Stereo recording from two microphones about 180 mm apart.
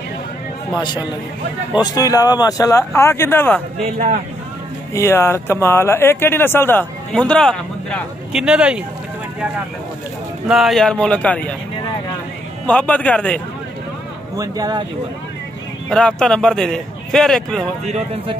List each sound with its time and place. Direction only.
0.7 s speech: 25° left (ahead or behind)
3.8 s speech: 40° right (ahead or behind)
4.9 s speech: 15° left (ahead or behind); by 8.8 s 5° right (ahead or behind)
10.5 s speech: centre (ahead or behind)
12.6 s speech: 5° left (ahead or behind)
14.3 s speech: 20° right (ahead or behind)
15.9 s speech: 5° left (ahead or behind)
17.8 s speech: 35° right (ahead or behind)